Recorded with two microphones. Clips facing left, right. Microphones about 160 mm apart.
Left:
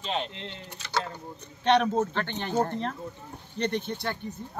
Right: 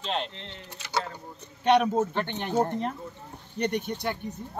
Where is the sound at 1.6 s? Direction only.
10° right (ahead or behind).